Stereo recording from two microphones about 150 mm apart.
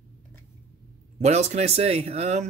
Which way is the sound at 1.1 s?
50° right (ahead or behind).